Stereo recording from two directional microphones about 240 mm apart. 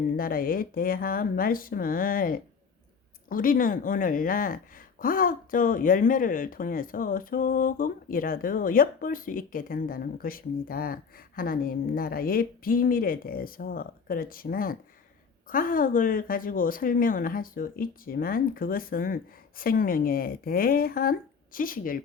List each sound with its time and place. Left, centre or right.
0.2 s speech: left